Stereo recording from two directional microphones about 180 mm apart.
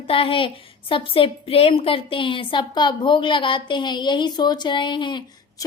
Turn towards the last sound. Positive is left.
turn(degrees=25)  # may be behind; listen again after turning